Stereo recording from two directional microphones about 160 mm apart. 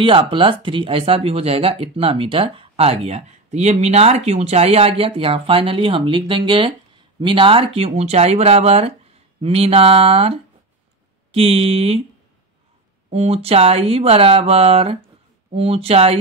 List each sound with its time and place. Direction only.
0.0 s speech: 30° right (ahead or behind)
13.1 s speech: 40° right (ahead or behind)